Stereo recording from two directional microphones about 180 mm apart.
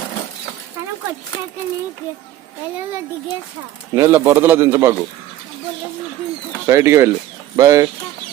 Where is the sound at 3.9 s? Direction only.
15° right (ahead or behind).